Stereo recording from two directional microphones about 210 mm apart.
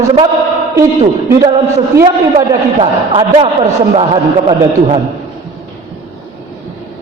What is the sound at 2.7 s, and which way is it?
A man's voice, 25° right (ahead or behind).